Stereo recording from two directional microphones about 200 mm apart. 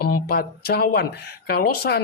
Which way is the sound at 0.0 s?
50° left (ahead or behind).